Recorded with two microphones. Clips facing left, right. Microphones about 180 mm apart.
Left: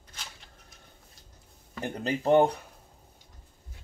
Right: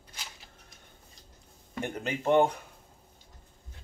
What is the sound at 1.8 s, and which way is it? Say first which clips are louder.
Speech: left 2 dB; 35° left (ahead or behind).